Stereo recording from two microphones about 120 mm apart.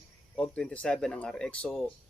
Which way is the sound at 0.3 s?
10° left (ahead or behind).